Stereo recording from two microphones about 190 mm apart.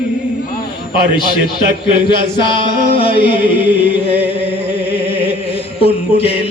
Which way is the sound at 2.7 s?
40° right (ahead or behind).